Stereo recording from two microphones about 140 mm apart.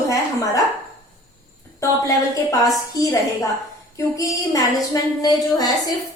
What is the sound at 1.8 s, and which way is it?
A woman's voice, 25° left (ahead or behind).